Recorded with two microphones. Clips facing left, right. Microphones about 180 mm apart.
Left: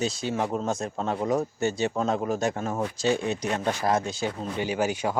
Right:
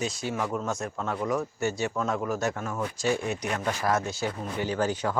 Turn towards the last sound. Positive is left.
turn(degrees=10)  # may be behind; listen again after turning